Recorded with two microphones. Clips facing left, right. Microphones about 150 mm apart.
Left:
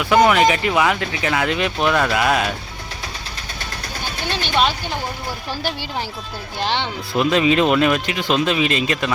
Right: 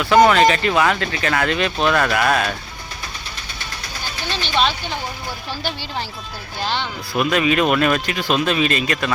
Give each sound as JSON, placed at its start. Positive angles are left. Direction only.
{"t": 0.3, "sound": "speech", "side_deg": 15}
{"t": 4.3, "sound": "a sound", "side_deg": 50}
{"t": 6.6, "sound": "speech", "side_deg": 20}